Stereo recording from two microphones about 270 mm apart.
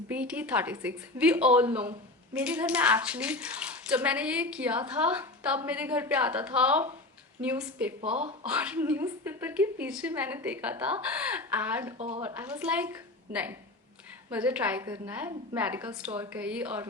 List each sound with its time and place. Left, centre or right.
0.1 s a woman's voice: centre
11.9 s speech: right
12.2 s a woman's voice: centre